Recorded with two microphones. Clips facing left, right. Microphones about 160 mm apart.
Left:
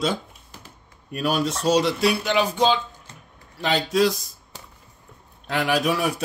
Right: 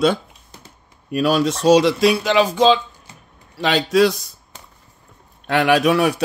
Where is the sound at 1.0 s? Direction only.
90° right.